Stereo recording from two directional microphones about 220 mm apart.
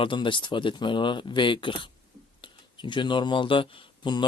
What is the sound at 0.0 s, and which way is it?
Speech, 20° left (ahead or behind).